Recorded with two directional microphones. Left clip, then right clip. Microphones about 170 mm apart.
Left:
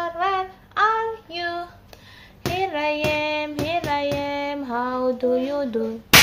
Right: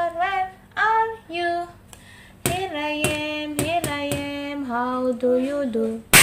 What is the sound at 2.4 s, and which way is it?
Hands, centre (ahead or behind).